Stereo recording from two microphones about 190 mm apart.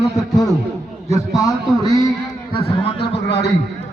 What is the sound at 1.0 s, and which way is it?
Speech, 15° left (ahead or behind).